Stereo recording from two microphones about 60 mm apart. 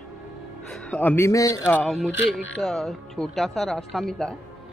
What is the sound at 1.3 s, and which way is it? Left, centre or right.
Speech, left.